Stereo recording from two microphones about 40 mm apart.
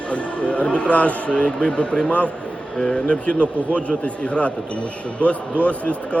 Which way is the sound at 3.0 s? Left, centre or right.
Left.